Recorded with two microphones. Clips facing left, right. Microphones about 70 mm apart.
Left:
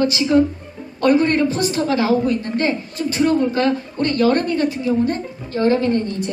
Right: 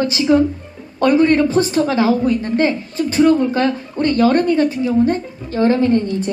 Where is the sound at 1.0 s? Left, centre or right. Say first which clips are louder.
Right 3 dB; right.